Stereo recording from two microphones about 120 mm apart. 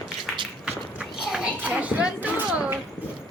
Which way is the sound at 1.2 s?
10° right (ahead or behind).